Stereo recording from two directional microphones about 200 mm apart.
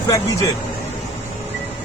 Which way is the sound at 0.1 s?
15° left (ahead or behind).